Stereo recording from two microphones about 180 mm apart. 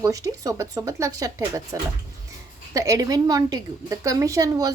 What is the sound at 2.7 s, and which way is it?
Speech, 20° right (ahead or behind).